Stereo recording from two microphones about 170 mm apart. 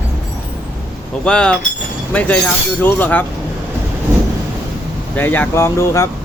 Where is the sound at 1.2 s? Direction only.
5° left (ahead or behind).